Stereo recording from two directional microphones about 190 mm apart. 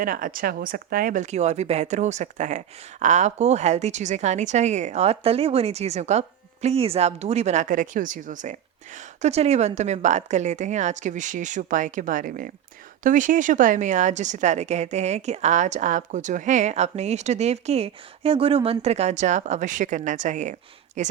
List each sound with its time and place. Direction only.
0.0 s speech: 50° right (ahead or behind)